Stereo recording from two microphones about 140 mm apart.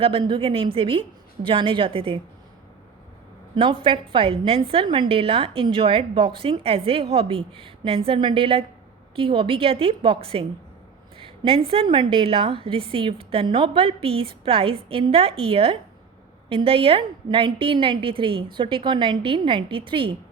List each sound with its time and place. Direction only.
0.0 s a woman's voice: 40° right (ahead or behind)
3.5 s a woman's voice: 35° right (ahead or behind)